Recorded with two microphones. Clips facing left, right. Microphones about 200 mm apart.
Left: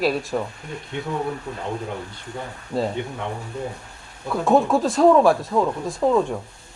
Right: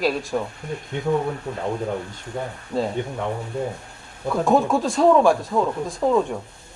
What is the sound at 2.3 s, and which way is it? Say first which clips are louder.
Speech: right 4 dB; 55° right (ahead or behind).